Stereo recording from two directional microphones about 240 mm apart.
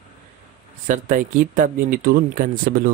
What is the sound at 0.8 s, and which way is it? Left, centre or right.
Speech, right.